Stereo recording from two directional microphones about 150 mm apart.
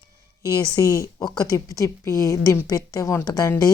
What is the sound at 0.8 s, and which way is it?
A woman's voice, 20° left (ahead or behind).